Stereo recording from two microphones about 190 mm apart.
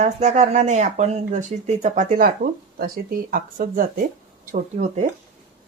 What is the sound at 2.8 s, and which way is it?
Speech, 50° right (ahead or behind).